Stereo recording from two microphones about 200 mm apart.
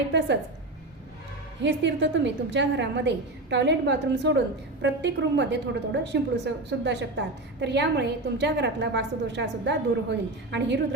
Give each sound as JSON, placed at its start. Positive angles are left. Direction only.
{"t": 1.6, "sound": "a woman's voice", "side_deg": -60}